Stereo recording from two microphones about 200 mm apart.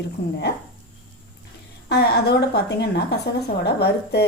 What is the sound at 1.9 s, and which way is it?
A woman's voice, 55° left (ahead or behind).